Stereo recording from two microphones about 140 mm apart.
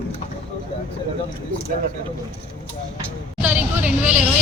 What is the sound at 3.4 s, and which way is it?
Vehicle, 10° right (ahead or behind).